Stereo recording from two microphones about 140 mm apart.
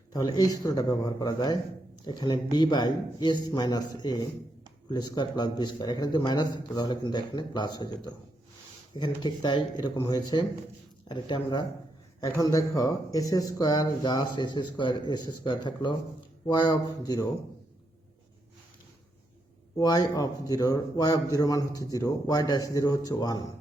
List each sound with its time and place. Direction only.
0.1 s a man's voice: 30° left (ahead or behind)
19.8 s speech: 25° left (ahead or behind)